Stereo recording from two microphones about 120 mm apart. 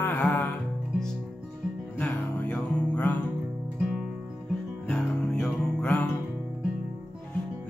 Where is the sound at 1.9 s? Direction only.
15° left (ahead or behind).